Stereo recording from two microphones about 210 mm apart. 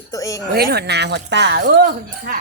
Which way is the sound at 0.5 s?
50° right (ahead or behind).